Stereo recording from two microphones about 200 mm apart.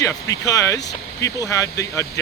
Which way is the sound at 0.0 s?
15° left (ahead or behind).